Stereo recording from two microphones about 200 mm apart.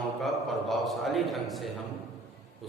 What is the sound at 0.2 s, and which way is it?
A man's voice, centre (ahead or behind).